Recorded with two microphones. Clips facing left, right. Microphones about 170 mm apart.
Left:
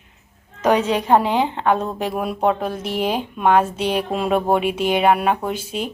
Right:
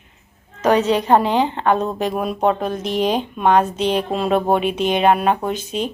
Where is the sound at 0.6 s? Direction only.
10° left (ahead or behind).